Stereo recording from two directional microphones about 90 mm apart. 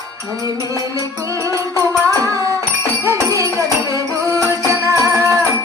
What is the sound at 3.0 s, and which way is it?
Music, 35° right (ahead or behind).